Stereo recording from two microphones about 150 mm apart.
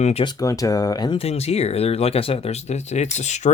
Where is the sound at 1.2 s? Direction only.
45° left (ahead or behind).